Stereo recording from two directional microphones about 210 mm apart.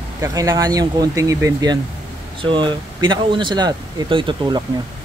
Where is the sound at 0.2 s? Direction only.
15° right (ahead or behind).